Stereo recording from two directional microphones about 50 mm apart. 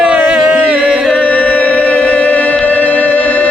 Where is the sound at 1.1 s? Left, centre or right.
Left.